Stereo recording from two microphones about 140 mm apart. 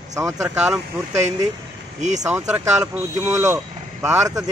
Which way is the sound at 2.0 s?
55° right (ahead or behind).